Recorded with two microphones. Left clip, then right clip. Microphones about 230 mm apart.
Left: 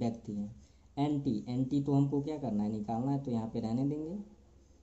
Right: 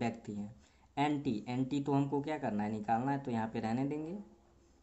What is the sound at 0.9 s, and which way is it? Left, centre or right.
Speech, centre.